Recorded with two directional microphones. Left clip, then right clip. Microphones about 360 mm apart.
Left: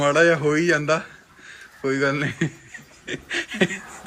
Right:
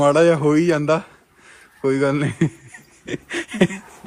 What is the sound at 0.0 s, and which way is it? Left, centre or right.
A man's voice, centre.